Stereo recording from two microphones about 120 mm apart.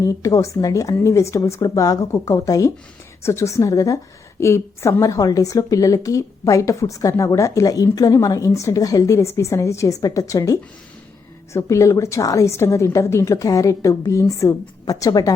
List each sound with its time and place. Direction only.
0.0 s a woman's voice: 25° left (ahead or behind)